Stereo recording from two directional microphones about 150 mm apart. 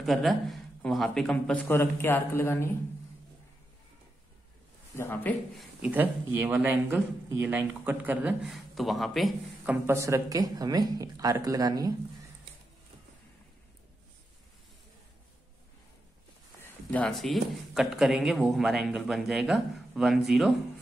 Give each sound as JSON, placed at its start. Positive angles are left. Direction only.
{"t": 0.0, "sound": "a man's voice", "side_deg": 0}
{"t": 4.9, "sound": "a man's voice", "side_deg": 15}
{"t": 5.6, "sound": "speech", "side_deg": -10}
{"t": 9.8, "sound": "speech", "side_deg": -20}
{"t": 16.6, "sound": "speech", "side_deg": 10}